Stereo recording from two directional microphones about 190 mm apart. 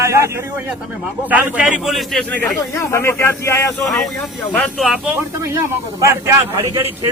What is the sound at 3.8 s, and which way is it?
A man's voice, centre (ahead or behind).